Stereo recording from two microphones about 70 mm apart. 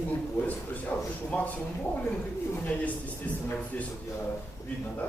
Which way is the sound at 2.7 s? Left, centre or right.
Centre.